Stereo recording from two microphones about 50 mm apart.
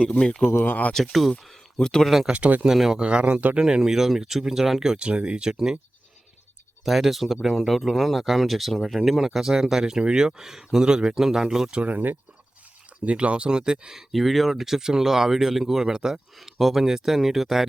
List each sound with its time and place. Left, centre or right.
0.0 s speech: centre
0.5 s speech: left
1.8 s speech: centre
2.3 s speech: right
2.6 s speech: centre
3.0 s speech: right
4.9 s speech: right
6.8 s speech: centre
11.7 s speech: right
14.1 s speech: centre